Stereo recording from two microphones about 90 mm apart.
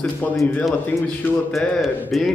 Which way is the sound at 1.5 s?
Centre (ahead or behind).